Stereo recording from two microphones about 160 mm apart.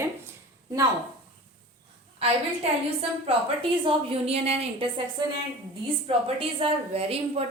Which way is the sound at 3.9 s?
35° right (ahead or behind).